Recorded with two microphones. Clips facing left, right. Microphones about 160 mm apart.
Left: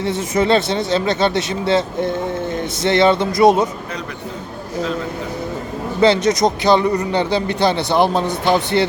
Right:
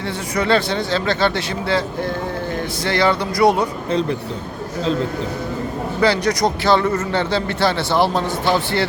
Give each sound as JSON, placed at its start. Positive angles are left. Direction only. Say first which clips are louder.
{"t": 0.0, "sound": "speech", "louder": "left 4 dB", "side_deg": 20}
{"t": 6.0, "sound": "speech", "louder": "left 4 dB", "side_deg": 20}